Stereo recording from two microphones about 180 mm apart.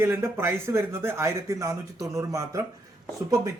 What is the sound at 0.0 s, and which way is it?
Speech, 15° right (ahead or behind).